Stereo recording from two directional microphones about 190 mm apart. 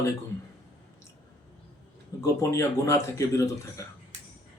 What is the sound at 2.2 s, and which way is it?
Speech, 15° left (ahead or behind).